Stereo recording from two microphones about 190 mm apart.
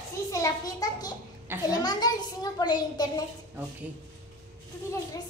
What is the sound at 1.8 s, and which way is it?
A child's voice, 20° left (ahead or behind).